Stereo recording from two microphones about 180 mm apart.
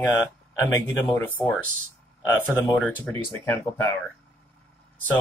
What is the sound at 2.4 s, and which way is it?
Speech, 5° left (ahead or behind).